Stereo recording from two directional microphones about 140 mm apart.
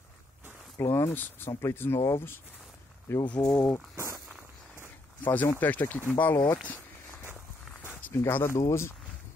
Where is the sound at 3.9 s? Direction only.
20° right (ahead or behind).